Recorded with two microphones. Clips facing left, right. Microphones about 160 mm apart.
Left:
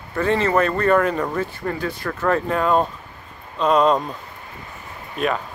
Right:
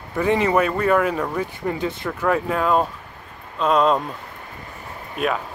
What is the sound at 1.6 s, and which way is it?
Speech, 20° right (ahead or behind).